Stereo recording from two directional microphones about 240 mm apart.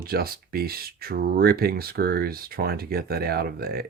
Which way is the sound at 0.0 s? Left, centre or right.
Right.